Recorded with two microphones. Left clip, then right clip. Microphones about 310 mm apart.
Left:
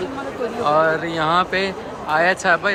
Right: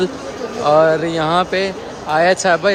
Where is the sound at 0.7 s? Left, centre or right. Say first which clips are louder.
Right 5 dB; centre.